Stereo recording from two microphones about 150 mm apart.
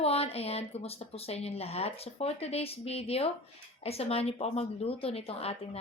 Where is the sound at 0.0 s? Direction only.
40° left (ahead or behind).